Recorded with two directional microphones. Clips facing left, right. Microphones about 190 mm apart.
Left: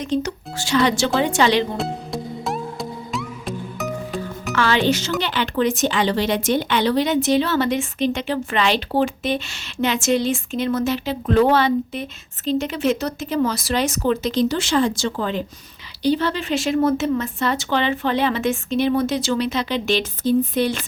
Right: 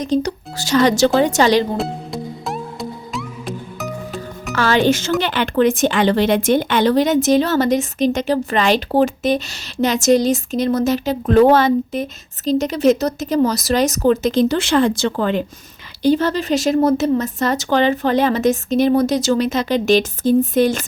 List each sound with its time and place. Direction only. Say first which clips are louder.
0.0 s speech: right 4 dB; 35° right (ahead or behind)
1.8 s music: right 2 dB; centre (ahead or behind)
4.5 s speech: right 3 dB; 45° right (ahead or behind); by 15.4 s 60° right (ahead or behind)
16.0 s speech: right 4 dB; 45° right (ahead or behind)